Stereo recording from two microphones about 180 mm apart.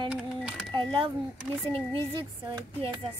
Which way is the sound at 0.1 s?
5° right (ahead or behind).